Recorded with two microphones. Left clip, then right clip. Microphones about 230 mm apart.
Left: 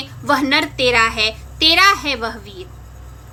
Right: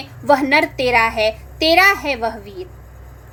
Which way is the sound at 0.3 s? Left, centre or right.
Centre.